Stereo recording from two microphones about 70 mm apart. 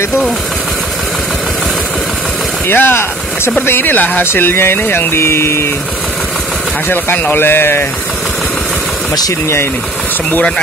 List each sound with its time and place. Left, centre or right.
2.7 s speech: left
6.9 s a man's voice: left